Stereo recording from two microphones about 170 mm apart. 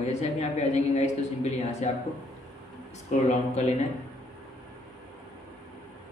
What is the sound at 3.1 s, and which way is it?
Speech, 45° left (ahead or behind).